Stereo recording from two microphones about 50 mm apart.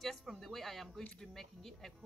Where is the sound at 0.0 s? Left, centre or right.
Centre.